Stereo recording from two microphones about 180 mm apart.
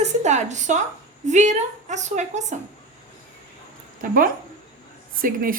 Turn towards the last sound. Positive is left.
turn(degrees=-50)  # may be behind; listen again after turning